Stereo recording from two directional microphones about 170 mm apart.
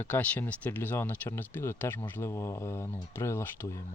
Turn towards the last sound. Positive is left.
turn(degrees=15)  # may be behind; listen again after turning